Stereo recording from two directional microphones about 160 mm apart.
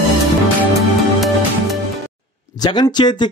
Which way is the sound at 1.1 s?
Centre (ahead or behind).